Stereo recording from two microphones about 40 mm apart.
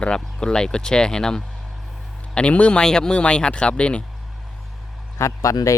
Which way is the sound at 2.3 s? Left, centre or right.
Left.